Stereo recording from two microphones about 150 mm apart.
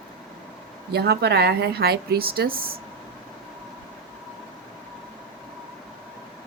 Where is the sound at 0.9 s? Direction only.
90° right.